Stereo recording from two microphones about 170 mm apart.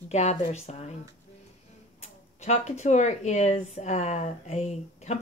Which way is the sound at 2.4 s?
45° left (ahead or behind).